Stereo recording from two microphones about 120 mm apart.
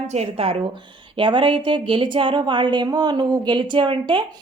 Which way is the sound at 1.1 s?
45° right (ahead or behind).